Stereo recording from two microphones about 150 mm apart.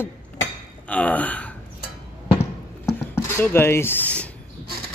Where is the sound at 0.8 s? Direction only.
10° left (ahead or behind).